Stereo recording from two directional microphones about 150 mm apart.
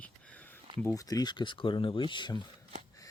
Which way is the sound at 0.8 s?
25° left (ahead or behind).